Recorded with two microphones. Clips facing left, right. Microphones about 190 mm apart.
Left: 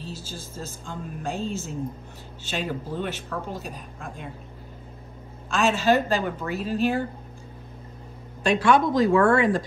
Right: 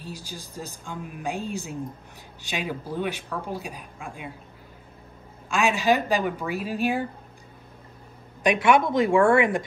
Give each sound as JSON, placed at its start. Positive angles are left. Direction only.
{"t": 0.0, "sound": "a woman's voice", "side_deg": -15}
{"t": 5.5, "sound": "a woman's voice", "side_deg": -15}
{"t": 8.5, "sound": "speech", "side_deg": -20}